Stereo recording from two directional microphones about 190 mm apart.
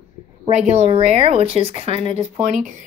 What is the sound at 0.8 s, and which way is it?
Speech, 35° right (ahead or behind).